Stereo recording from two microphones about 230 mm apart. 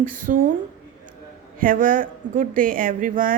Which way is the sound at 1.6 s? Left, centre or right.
Right.